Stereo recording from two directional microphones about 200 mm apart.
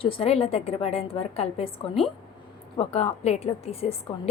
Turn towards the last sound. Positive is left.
turn(degrees=30)  # may be behind; listen again after turning